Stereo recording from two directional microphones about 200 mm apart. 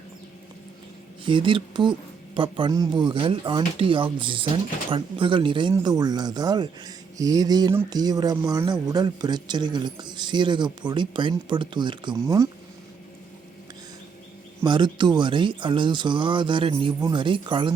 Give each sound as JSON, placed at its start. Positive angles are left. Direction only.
{"t": 1.2, "sound": "speech", "side_deg": -25}
{"t": 14.6, "sound": "speech", "side_deg": -20}